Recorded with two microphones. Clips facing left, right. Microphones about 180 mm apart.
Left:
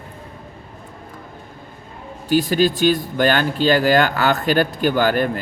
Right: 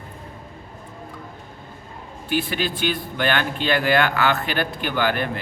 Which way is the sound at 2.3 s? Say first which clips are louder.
Left 8 dB; 40° left (ahead or behind).